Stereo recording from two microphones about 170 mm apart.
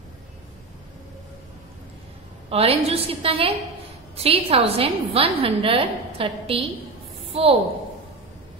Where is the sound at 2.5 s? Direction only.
35° right (ahead or behind).